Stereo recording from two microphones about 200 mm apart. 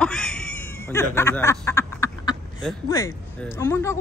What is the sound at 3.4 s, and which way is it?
Speech, 10° left (ahead or behind).